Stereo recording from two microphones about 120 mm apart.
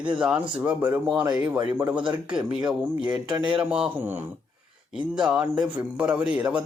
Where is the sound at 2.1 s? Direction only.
10° right (ahead or behind).